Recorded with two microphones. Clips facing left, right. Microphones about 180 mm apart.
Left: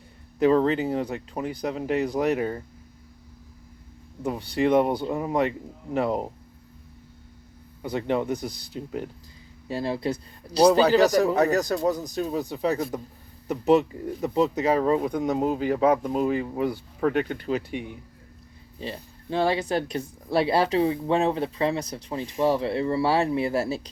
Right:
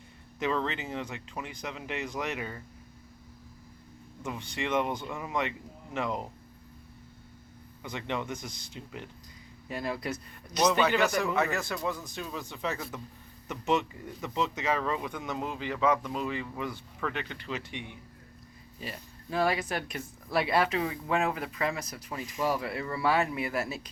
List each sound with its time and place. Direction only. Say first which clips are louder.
0.3 s speech: left 11 dB; 40° left (ahead or behind)
4.2 s speech: left 11 dB; 35° left (ahead or behind)
7.8 s speech: left 9 dB; 40° left (ahead or behind)
9.6 s speech: left 7 dB; 30° left (ahead or behind)
18.8 s speech: left 7 dB; 30° left (ahead or behind)